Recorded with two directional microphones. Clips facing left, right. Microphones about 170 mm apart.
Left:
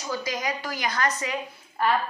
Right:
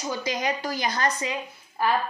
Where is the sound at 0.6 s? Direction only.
35° right (ahead or behind).